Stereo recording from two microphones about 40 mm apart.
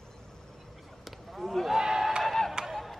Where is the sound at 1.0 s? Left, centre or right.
Centre.